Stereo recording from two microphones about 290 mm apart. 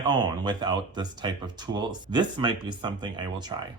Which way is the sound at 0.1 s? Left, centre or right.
Centre.